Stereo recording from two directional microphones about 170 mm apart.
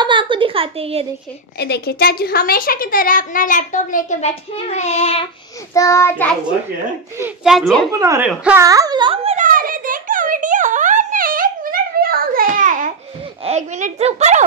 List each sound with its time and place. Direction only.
0.0 s a sound: 30° right (ahead or behind)
1.6 s a woman's voice: 70° left (ahead or behind); by 5.3 s 35° left (ahead or behind)
5.7 s child singing: 20° left (ahead or behind)
7.4 s a child's voice: centre (ahead or behind)
8.0 s speech: 20° right (ahead or behind); by 9.4 s 35° right (ahead or behind)
9.4 s a sound: 55° right (ahead or behind)
13.4 s a child's voice: 40° right (ahead or behind)